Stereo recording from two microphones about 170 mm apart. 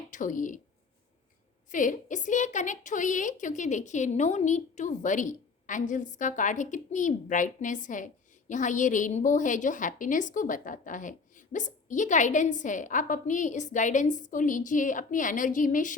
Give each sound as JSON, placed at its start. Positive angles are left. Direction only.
{"t": 0.1, "sound": "a woman's voice", "side_deg": 50}
{"t": 1.7, "sound": "a woman's voice", "side_deg": 50}